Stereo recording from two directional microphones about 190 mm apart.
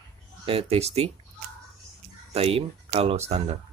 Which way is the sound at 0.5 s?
30° right (ahead or behind).